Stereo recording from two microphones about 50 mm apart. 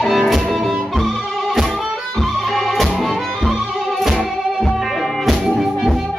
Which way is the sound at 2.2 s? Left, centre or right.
Centre.